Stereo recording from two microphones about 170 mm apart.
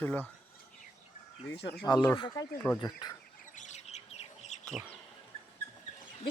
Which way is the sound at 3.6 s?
45° left (ahead or behind).